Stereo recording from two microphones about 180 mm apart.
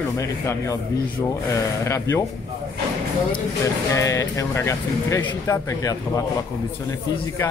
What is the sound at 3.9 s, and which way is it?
Speech, 15° left (ahead or behind).